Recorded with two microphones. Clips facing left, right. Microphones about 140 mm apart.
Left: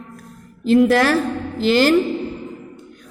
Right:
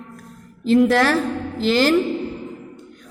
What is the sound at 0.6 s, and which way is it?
A woman's voice, 5° left (ahead or behind).